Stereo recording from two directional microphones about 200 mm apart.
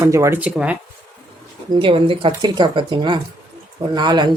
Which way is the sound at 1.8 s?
25° right (ahead or behind).